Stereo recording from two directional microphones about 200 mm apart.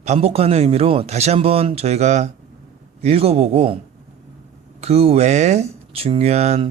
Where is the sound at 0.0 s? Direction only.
30° right (ahead or behind).